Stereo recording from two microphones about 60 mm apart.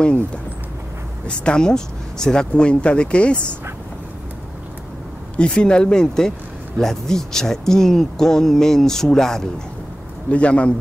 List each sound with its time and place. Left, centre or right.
1.2 s speech: centre
5.3 s speech: centre
10.3 s a man's voice: left